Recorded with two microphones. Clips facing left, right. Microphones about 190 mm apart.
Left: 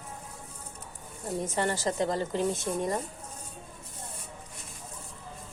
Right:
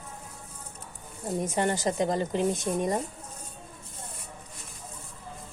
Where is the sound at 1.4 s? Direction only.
15° right (ahead or behind).